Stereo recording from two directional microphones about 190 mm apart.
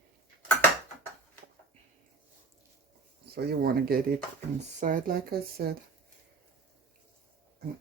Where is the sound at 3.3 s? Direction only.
60° right (ahead or behind).